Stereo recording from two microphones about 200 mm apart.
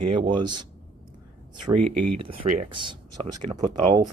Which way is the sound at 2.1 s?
25° right (ahead or behind).